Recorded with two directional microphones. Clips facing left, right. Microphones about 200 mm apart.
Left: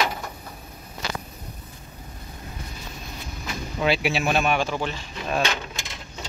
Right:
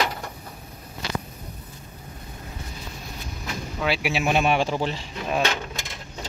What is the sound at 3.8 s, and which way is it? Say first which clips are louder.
Speech: left 2 dB; 5° right (ahead or behind).